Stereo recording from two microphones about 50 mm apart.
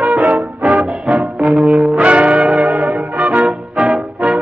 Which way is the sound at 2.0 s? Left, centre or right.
Right.